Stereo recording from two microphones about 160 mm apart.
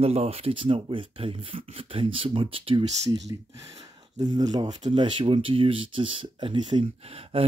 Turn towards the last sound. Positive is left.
turn(degrees=-35)  # may be behind; listen again after turning